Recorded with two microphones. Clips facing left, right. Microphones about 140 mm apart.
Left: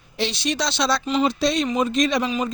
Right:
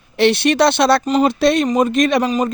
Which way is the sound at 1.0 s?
45° right (ahead or behind).